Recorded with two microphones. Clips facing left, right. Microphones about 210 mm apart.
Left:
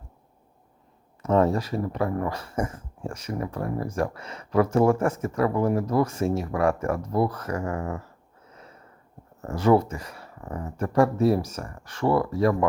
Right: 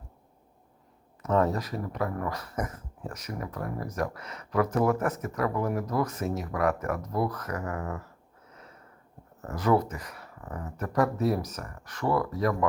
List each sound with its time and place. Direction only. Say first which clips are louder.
1.2 s speech: left 4 dB; 30° left (ahead or behind)
9.4 s speech: left 5 dB; 25° left (ahead or behind)